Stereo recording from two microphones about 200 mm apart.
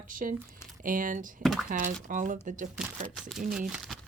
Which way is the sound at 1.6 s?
40° right (ahead or behind).